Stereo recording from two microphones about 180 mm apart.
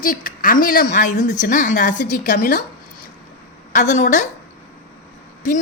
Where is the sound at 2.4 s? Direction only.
60° left (ahead or behind).